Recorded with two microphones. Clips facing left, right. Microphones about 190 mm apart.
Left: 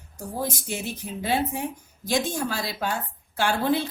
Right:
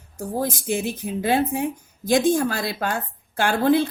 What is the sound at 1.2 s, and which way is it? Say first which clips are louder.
A woman's voice: right 5 dB; 50° right (ahead or behind).